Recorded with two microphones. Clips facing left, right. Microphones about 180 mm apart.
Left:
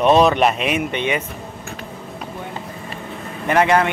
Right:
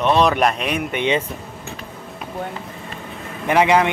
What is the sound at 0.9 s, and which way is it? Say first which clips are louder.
Speech: right 2 dB; 20° right (ahead or behind).